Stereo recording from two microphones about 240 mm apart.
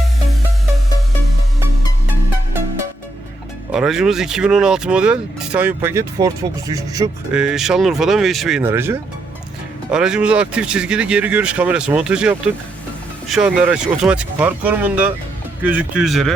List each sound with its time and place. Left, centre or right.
3.7 s speech: centre
7.3 s speech: centre